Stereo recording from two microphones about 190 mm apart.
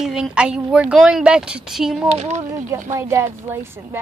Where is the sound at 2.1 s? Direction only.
35° right (ahead or behind).